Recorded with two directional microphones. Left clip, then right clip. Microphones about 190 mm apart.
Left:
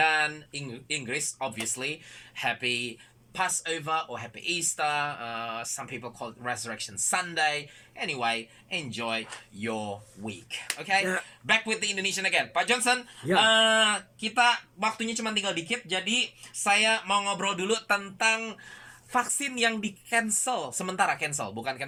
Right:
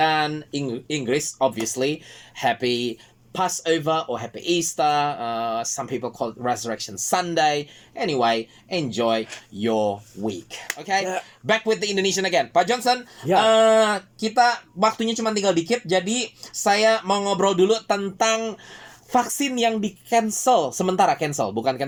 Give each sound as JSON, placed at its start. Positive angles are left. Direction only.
{"t": 0.0, "sound": "speech", "side_deg": -35}
{"t": 16.7, "sound": "speech", "side_deg": -30}